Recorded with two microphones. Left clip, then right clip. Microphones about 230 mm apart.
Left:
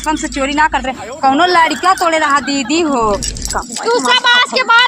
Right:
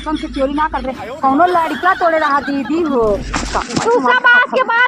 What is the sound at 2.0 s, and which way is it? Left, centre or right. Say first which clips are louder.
Speech: left 1 dB; left.